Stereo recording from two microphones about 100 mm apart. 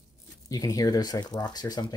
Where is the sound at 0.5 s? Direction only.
35° left (ahead or behind).